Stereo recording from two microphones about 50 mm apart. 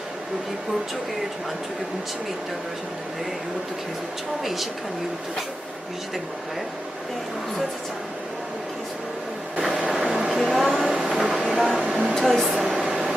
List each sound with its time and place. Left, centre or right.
4.4 s speech: centre
9.7 s vehicle: centre
10.2 s a sound: centre
10.8 s vehicle: centre
11.8 s a sound: centre
12.1 s air conditioning: centre